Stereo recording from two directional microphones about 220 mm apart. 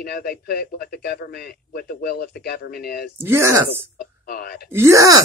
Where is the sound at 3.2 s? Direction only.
10° right (ahead or behind).